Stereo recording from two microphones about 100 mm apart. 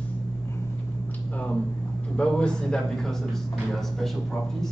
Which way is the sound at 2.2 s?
10° left (ahead or behind).